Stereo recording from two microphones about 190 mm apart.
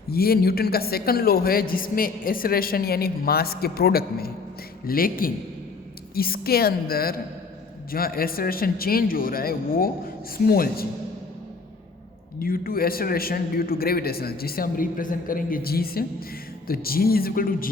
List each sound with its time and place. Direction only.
0.1 s a man's voice: 55° left (ahead or behind)
12.4 s a man's voice: 50° left (ahead or behind)